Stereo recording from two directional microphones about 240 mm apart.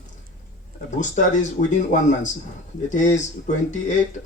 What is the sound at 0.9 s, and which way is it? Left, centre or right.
Speech, left.